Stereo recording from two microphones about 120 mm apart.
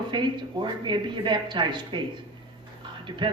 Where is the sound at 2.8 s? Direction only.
40° right (ahead or behind).